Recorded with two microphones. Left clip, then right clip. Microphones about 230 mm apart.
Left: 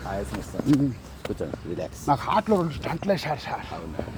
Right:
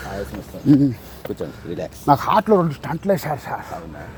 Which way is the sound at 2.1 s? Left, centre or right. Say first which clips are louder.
Right 7 dB; right.